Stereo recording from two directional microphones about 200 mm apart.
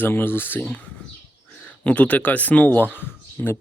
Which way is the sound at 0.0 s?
10° left (ahead or behind).